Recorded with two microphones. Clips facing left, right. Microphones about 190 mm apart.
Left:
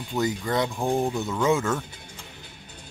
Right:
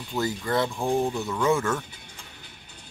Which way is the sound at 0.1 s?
20° left (ahead or behind).